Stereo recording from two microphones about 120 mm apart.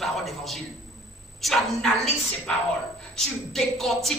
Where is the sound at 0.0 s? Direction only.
Centre (ahead or behind).